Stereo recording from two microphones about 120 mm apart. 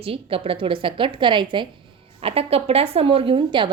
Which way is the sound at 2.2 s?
55° right (ahead or behind).